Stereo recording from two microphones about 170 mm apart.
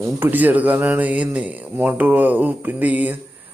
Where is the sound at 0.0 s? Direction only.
10° right (ahead or behind).